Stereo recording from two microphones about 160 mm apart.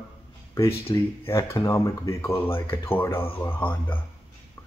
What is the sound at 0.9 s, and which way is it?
Speech, 30° left (ahead or behind).